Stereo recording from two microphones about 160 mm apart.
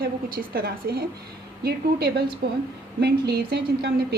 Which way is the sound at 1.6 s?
85° right.